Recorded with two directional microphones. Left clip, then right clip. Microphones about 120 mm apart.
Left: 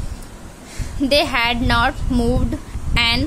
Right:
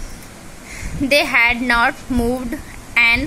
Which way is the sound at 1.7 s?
5° left (ahead or behind).